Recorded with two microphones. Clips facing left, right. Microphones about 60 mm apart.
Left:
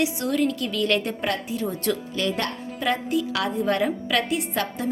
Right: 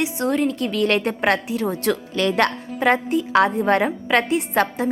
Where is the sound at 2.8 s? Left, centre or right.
Right.